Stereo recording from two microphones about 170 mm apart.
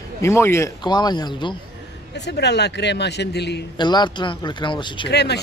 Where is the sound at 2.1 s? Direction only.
85° left.